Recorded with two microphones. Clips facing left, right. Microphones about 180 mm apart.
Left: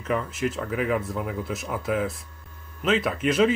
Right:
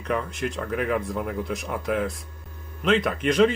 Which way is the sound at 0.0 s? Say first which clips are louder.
Left 1 dB; 5° left (ahead or behind).